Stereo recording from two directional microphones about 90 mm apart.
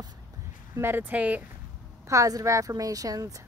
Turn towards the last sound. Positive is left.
turn(degrees=-40)  # may be behind; listen again after turning